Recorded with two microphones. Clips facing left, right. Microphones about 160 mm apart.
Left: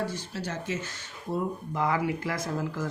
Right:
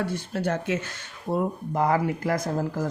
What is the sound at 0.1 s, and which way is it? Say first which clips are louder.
Speech: right 7 dB; 55° right (ahead or behind).